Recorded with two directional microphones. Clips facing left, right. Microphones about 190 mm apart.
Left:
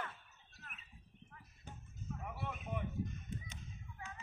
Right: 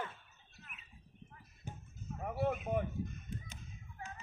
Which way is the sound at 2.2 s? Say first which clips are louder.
Right 12 dB; 45° right (ahead or behind).